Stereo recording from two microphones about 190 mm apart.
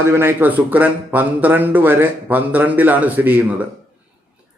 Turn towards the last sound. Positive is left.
turn(degrees=-10)  # may be behind; listen again after turning